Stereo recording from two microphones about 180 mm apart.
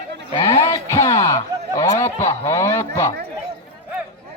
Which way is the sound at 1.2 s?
15° left (ahead or behind).